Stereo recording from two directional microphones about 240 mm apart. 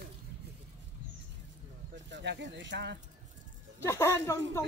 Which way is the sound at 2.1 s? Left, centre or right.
Right.